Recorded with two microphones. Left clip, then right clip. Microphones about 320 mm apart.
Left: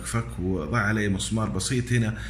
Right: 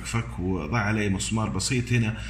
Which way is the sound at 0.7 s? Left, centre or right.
Centre.